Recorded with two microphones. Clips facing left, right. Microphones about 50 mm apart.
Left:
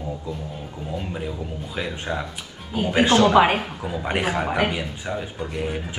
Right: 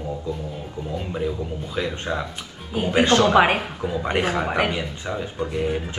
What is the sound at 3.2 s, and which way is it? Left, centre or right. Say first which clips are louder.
Speech: left 2 dB; right.